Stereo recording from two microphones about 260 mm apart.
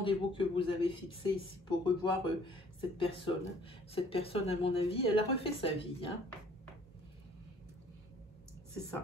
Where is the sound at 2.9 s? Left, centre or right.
Centre.